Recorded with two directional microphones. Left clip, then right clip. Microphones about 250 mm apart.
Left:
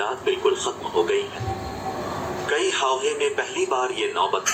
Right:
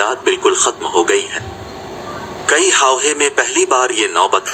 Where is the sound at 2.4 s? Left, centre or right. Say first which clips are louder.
Right 11 dB; right.